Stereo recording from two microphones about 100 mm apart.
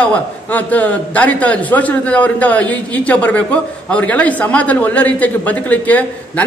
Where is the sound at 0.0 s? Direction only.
15° left (ahead or behind).